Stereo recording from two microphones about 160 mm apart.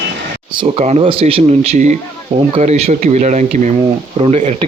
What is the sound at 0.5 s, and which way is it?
Speech, 40° right (ahead or behind).